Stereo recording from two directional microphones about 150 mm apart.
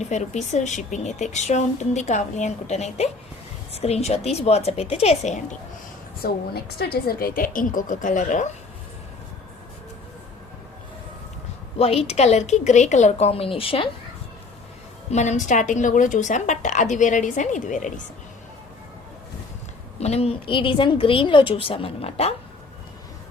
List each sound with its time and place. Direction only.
0.0 s a woman's voice: 50° left (ahead or behind)
6.2 s a woman's voice: 90° left; by 8.4 s 55° left (ahead or behind)
11.8 s a woman's voice: 40° left (ahead or behind)
15.1 s a woman's voice: 50° left (ahead or behind)
20.0 s a woman's voice: 45° left (ahead or behind)